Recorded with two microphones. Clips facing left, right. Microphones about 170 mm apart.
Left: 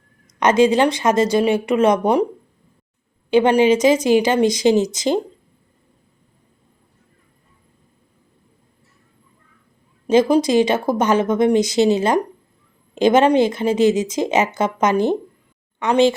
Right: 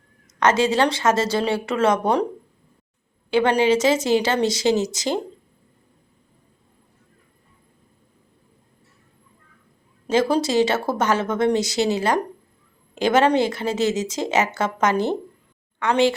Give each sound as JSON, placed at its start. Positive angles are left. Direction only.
{"t": 0.3, "sound": "a woman's voice", "side_deg": 15}
{"t": 3.2, "sound": "a woman's voice", "side_deg": 20}
{"t": 10.1, "sound": "a woman's voice", "side_deg": 15}